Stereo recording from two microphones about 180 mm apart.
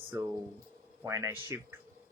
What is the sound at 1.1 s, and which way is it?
Speech, 15° right (ahead or behind).